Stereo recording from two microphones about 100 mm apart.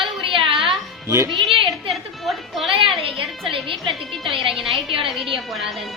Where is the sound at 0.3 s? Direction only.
65° right (ahead or behind).